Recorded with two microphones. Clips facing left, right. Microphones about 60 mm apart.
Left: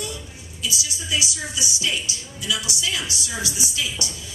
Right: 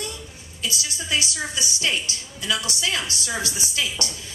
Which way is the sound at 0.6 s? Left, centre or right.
Right.